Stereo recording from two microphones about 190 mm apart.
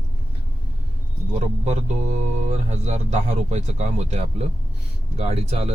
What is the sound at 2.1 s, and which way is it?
Speech, 35° right (ahead or behind).